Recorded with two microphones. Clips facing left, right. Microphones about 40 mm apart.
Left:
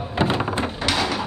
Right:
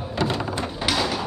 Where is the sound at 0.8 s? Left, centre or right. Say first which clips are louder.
Even; centre.